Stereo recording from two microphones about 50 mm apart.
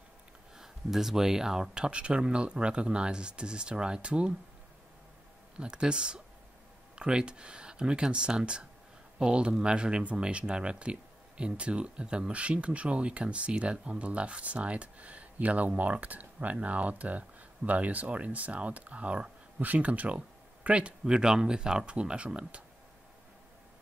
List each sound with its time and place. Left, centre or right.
0.6 s speech: centre
5.6 s speech: centre
21.0 s speech: centre